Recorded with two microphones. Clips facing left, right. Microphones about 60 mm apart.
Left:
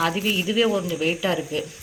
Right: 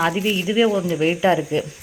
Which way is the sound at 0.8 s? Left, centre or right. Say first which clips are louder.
Right 5 dB; right.